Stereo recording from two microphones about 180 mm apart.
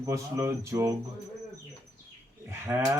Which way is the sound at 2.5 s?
15° right (ahead or behind).